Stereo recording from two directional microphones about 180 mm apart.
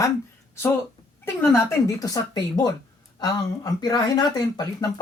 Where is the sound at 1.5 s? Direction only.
15° left (ahead or behind).